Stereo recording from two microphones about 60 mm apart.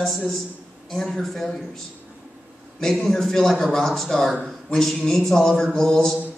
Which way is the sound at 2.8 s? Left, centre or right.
Centre.